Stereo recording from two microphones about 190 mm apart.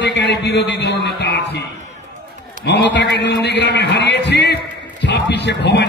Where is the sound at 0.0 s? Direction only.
65° left (ahead or behind).